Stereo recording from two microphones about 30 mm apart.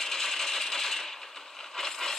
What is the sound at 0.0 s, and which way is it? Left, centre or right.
Coin, centre.